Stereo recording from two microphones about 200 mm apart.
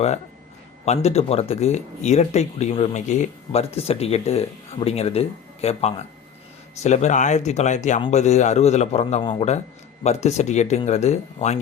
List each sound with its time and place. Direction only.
0.9 s speech: 30° left (ahead or behind)